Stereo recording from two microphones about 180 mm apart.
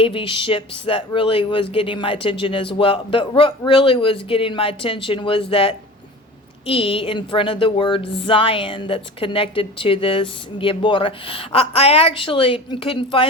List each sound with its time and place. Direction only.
0.0 s speech: 30° left (ahead or behind)